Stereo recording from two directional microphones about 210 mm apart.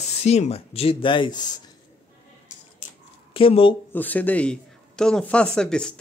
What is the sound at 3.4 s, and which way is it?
Speech, 25° left (ahead or behind).